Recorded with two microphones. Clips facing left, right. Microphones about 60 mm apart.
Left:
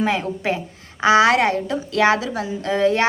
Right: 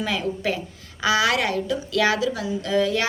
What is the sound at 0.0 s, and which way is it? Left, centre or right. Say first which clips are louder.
A woman's voice: left 4 dB; left.